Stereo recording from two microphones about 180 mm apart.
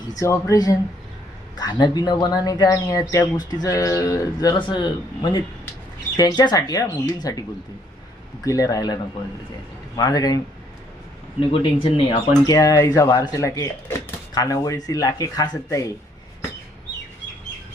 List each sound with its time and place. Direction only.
0.2 s speech: 20° left (ahead or behind)
8.4 s speech: 20° left (ahead or behind)
10.0 s speech: 20° left (ahead or behind)
12.4 s speech: 20° left (ahead or behind)